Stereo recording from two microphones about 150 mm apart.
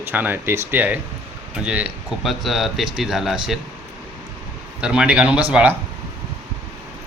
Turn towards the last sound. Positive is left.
turn(degrees=-10)  # may be behind; listen again after turning